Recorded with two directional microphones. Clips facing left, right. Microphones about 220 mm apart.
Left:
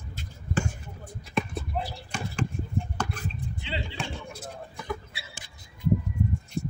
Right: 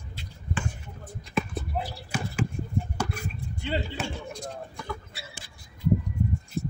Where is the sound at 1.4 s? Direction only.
Centre (ahead or behind).